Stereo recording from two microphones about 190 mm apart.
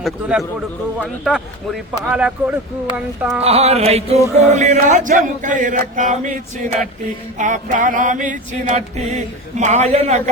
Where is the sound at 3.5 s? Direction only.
35° right (ahead or behind).